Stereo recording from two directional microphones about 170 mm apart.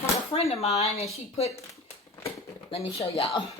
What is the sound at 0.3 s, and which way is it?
Speech, 40° left (ahead or behind).